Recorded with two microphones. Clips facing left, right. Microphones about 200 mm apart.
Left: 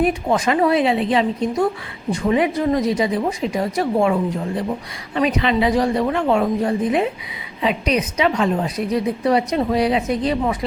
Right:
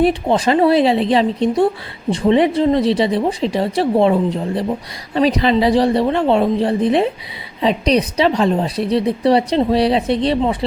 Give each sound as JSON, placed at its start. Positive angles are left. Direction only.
{"t": 0.0, "sound": "a woman's voice", "side_deg": -30}